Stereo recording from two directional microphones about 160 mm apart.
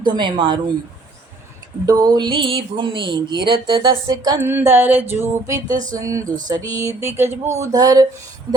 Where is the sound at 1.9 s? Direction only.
25° right (ahead or behind).